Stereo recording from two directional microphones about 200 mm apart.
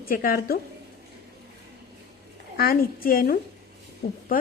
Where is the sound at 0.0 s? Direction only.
45° left (ahead or behind).